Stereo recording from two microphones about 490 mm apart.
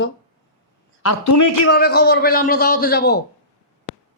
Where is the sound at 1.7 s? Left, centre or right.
Centre.